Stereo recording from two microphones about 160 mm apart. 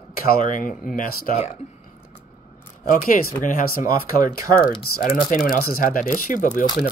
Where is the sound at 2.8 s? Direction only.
60° left (ahead or behind).